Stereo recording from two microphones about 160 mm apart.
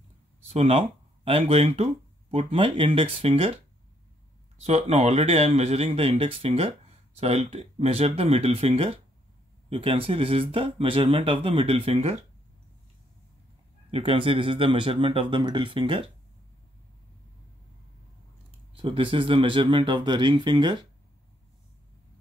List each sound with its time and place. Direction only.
0.5 s speech: 40° right (ahead or behind)
4.6 s speech: 40° right (ahead or behind)
13.8 s speech: 35° right (ahead or behind)
18.8 s speech: 35° right (ahead or behind)